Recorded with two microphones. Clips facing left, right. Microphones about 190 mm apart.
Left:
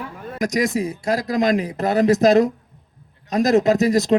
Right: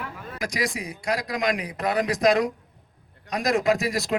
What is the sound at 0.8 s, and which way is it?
Speech, 25° left (ahead or behind).